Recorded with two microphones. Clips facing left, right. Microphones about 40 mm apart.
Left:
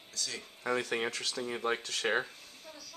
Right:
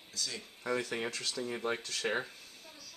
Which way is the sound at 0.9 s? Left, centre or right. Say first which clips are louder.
Left 3 dB; left.